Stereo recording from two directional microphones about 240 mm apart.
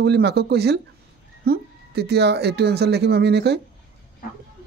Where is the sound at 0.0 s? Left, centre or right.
Right.